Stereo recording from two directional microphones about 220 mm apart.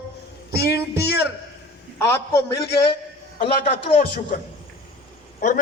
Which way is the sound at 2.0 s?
10° left (ahead or behind).